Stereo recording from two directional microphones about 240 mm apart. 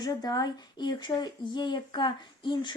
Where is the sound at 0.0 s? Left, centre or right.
Centre.